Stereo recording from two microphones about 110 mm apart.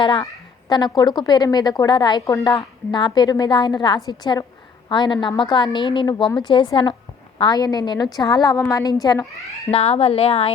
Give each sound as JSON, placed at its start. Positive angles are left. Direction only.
{"t": 0.0, "sound": "a woman's voice", "side_deg": 50}
{"t": 9.7, "sound": "speech", "side_deg": 65}